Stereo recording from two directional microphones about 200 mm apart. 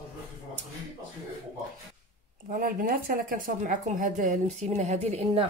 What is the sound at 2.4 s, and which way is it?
A woman's voice, 45° right (ahead or behind).